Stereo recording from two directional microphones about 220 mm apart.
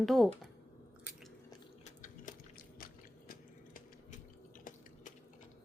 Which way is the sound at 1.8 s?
35° left (ahead or behind).